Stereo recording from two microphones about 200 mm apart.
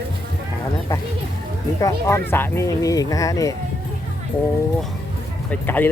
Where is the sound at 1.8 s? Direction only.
15° left (ahead or behind).